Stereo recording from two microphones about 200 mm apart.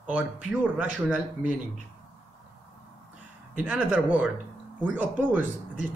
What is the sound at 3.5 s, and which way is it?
Speech, 5° right (ahead or behind).